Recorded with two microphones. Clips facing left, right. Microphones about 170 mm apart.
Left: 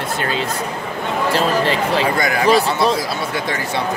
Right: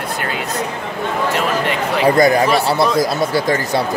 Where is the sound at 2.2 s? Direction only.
35° right (ahead or behind).